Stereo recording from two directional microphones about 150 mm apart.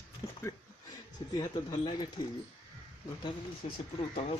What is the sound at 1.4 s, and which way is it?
Speech, 30° left (ahead or behind).